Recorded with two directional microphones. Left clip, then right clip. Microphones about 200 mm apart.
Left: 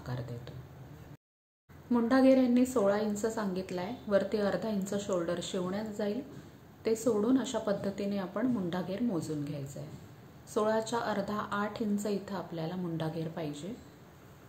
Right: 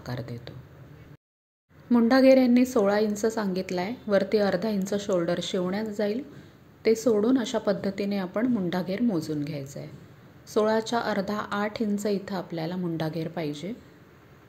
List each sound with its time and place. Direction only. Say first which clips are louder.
0.0 s a woman's voice: right 5 dB; 30° right (ahead or behind)
1.9 s a woman's voice: right 7 dB; 30° right (ahead or behind)